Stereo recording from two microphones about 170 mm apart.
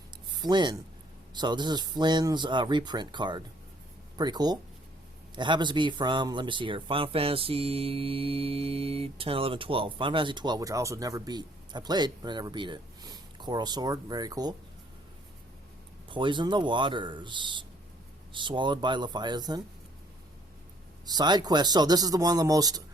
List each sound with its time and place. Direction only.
0.4 s speech: 25° right (ahead or behind)
16.0 s speech: 30° right (ahead or behind)
21.1 s speech: 25° right (ahead or behind)